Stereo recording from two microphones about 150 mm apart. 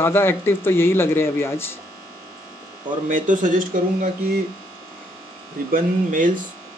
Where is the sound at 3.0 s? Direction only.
60° right (ahead or behind).